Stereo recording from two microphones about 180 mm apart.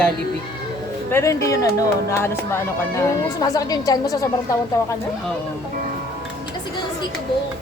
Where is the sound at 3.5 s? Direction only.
20° left (ahead or behind).